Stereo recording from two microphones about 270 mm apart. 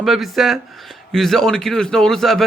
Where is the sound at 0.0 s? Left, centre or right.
Centre.